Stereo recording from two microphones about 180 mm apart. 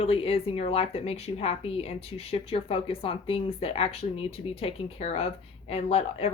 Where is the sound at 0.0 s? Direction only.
30° left (ahead or behind).